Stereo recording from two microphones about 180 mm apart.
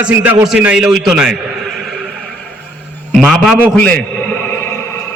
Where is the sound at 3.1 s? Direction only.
Centre (ahead or behind).